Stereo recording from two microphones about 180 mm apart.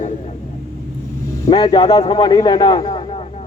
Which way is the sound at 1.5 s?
20° left (ahead or behind).